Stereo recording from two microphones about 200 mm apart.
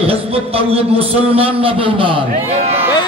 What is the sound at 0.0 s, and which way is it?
A man's voice, 30° right (ahead or behind).